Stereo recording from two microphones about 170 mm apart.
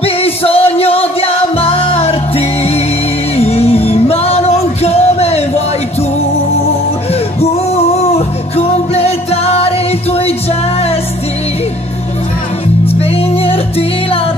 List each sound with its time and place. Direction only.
0.0 s music: 35° left (ahead or behind)
8.5 s music: 40° left (ahead or behind)
12.8 s music: 35° left (ahead or behind)